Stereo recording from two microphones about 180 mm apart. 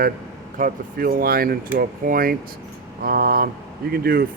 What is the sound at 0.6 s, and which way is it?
Speech, 55° right (ahead or behind).